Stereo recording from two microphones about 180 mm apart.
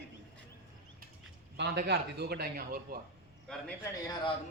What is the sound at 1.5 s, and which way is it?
Speech, 70° right (ahead or behind).